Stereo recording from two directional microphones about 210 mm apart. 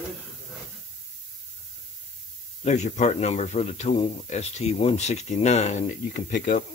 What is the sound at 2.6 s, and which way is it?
Speech, 35° left (ahead or behind).